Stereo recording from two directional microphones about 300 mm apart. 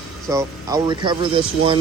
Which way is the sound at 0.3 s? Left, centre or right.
Centre.